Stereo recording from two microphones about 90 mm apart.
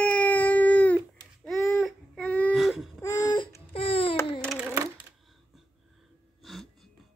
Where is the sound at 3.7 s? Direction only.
90° left.